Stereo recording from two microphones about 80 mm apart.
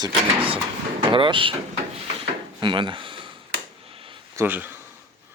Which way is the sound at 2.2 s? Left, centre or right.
Right.